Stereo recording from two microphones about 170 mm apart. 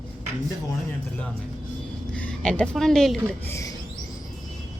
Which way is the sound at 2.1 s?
5° left (ahead or behind).